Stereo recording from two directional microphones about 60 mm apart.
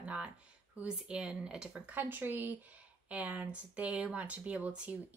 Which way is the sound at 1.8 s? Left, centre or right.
Right.